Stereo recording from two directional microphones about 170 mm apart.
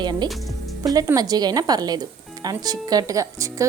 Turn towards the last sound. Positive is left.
turn(degrees=-20)  # may be behind; listen again after turning